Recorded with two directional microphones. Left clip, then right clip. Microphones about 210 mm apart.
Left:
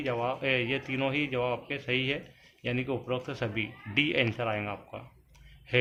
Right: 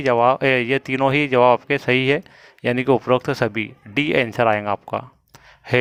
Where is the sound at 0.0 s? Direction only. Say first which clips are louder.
Right 15 dB; 50° right (ahead or behind).